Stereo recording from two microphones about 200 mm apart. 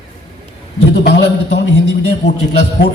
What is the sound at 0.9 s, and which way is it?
Speech, 60° left (ahead or behind).